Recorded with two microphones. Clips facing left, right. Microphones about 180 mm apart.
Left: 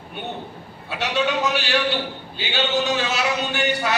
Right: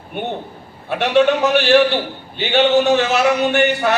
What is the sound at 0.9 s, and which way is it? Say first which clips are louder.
A man's voice: right 9 dB; 55° right (ahead or behind).